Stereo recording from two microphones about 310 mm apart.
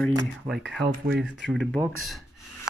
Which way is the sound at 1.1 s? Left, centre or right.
Right.